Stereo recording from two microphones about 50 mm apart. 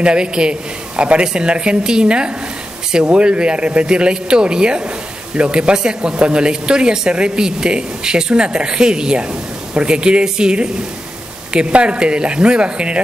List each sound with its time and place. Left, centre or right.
0.0 s a woman's voice: centre